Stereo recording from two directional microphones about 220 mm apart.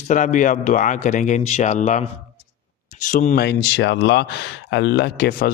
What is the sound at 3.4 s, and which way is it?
Speech, 50° left (ahead or behind).